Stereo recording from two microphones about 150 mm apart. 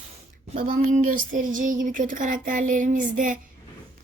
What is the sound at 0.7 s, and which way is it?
Speech, 60° right (ahead or behind).